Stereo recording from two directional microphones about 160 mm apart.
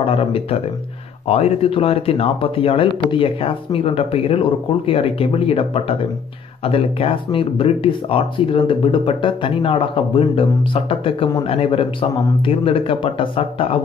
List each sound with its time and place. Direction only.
0.0 s speech: 35° left (ahead or behind)